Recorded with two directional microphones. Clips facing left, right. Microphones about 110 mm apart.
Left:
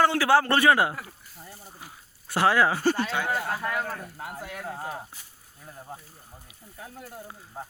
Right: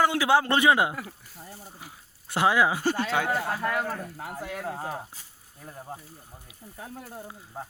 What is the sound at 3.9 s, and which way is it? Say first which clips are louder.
Speech: right 2 dB; 45° right (ahead or behind).